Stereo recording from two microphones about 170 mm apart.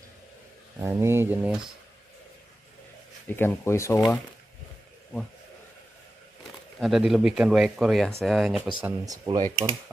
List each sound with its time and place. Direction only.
0.7 s speech: 15° right (ahead or behind)
3.3 s speech: 10° left (ahead or behind)
6.8 s speech: centre (ahead or behind)
8.8 s speech: 20° right (ahead or behind)